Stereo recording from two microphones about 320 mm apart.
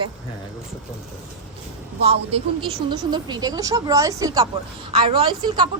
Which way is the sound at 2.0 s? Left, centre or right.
Centre.